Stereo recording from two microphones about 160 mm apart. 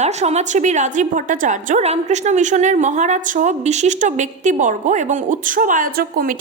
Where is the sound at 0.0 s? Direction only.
45° right (ahead or behind).